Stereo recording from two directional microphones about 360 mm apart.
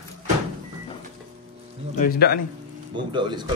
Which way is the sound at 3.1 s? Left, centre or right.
Centre.